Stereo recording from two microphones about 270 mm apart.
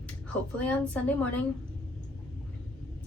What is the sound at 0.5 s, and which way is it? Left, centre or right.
Speech, centre.